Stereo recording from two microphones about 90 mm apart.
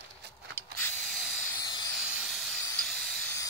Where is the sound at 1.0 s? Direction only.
Centre (ahead or behind).